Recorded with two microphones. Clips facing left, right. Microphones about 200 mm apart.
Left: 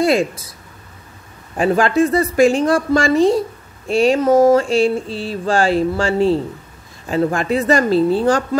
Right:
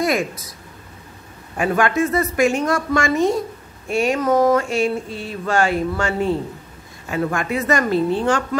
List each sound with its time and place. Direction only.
0.0 s speech: 30° left (ahead or behind)
1.6 s a woman's voice: 30° left (ahead or behind)